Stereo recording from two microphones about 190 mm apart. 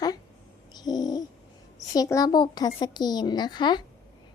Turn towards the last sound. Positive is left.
turn(degrees=25)  # may be behind; listen again after turning